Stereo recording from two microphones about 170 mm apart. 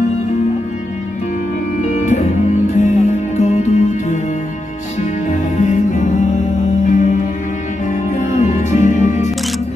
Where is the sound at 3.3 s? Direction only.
45° left (ahead or behind).